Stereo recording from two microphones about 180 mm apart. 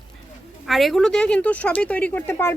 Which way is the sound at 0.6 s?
Centre (ahead or behind).